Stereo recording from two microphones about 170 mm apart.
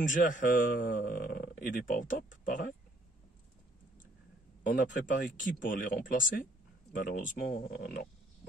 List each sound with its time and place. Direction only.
0.0 s speech: 50° left (ahead or behind)
4.6 s speech: 55° left (ahead or behind)